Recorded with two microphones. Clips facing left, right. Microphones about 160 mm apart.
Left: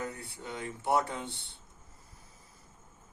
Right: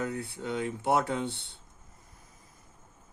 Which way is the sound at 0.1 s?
65° right (ahead or behind).